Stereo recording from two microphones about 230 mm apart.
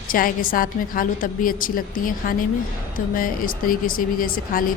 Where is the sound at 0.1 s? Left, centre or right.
Left.